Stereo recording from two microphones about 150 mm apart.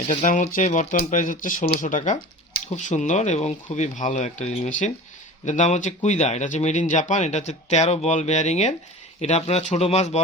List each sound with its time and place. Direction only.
0.1 s speech: 55° left (ahead or behind)